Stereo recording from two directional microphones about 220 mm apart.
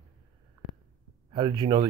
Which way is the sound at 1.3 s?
20° right (ahead or behind).